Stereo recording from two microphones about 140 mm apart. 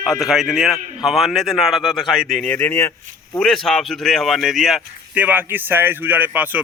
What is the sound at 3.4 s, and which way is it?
Speech, centre (ahead or behind).